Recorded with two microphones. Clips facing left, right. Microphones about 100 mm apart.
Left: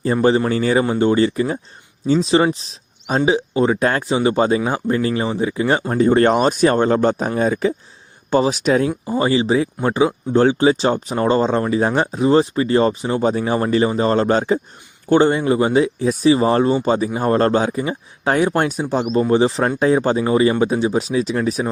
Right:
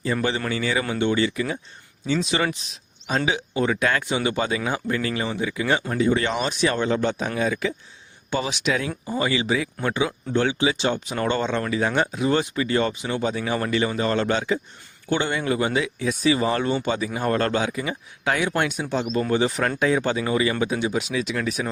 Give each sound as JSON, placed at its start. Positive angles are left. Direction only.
{"t": 0.0, "sound": "speech", "side_deg": 35}